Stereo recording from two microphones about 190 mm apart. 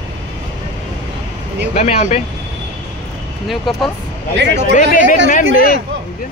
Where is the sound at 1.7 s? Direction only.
35° left (ahead or behind).